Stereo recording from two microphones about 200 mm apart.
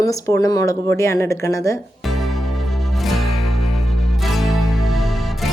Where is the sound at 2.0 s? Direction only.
Centre (ahead or behind).